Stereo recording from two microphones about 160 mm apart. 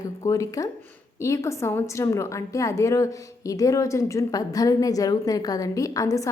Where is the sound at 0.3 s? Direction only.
20° left (ahead or behind).